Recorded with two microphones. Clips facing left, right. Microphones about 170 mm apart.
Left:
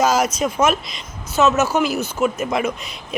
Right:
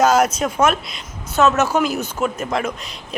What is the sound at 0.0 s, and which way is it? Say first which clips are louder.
Speech: right 2 dB; centre (ahead or behind).